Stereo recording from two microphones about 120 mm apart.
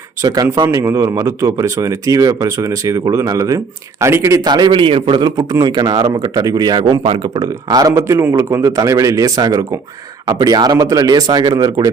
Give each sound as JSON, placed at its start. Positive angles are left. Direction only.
{"t": 0.2, "sound": "speech", "side_deg": -30}
{"t": 5.4, "sound": "speech", "side_deg": -30}